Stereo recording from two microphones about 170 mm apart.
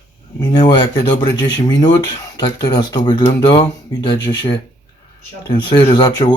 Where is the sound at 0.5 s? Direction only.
25° left (ahead or behind).